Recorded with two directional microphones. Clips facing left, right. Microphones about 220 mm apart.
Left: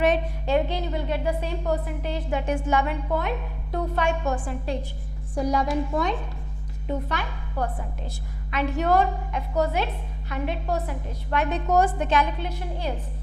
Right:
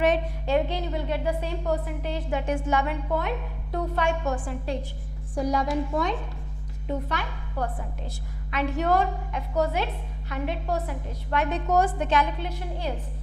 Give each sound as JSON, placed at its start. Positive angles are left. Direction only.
{"t": 0.0, "sound": "a woman's voice", "side_deg": 10}